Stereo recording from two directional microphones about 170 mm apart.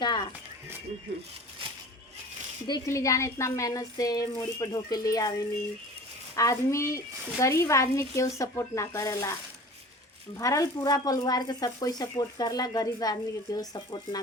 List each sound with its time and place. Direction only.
0.0 s a sound: 25° left (ahead or behind)
2.6 s a woman's voice: 20° left (ahead or behind)
10.3 s speech: 20° left (ahead or behind)